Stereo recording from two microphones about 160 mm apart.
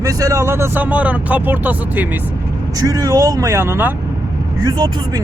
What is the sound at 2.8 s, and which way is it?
Speech, 25° right (ahead or behind).